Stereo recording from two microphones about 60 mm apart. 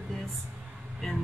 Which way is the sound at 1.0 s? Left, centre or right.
Centre.